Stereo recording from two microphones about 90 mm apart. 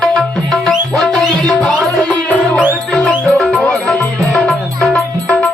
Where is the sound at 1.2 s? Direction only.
10° left (ahead or behind).